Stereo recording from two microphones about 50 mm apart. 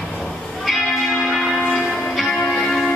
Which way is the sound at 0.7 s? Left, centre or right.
Centre.